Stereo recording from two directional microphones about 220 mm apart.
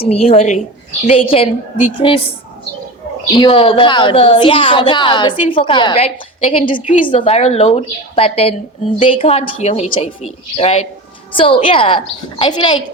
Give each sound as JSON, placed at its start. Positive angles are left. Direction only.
{"t": 0.0, "sound": "a woman's voice", "side_deg": 25}
{"t": 3.3, "sound": "a woman's voice", "side_deg": 25}